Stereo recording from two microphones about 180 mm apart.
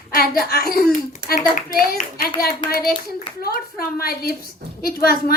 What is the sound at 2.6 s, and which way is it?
Speech, 25° left (ahead or behind).